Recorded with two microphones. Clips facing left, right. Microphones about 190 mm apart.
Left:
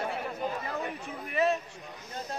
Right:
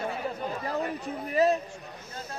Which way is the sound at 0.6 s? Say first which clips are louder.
Right 4 dB; 35° right (ahead or behind).